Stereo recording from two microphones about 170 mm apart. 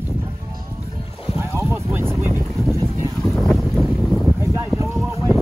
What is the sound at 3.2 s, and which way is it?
Boat, centre (ahead or behind).